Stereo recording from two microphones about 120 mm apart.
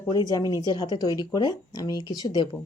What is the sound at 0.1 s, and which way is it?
A woman's voice, 35° left (ahead or behind).